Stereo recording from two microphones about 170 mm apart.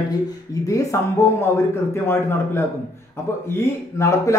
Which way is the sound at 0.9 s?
15° left (ahead or behind).